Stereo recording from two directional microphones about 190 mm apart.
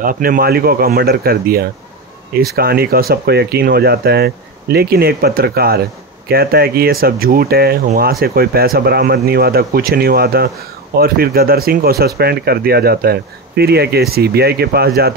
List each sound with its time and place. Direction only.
0.0 s speech: 50° right (ahead or behind)